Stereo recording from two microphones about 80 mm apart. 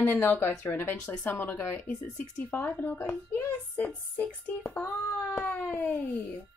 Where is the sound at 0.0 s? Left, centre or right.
Left.